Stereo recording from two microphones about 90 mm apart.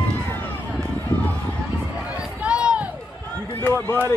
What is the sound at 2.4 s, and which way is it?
Run, 10° right (ahead or behind).